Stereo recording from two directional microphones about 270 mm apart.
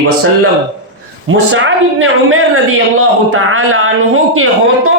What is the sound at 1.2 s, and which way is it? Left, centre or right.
A man's voice, right.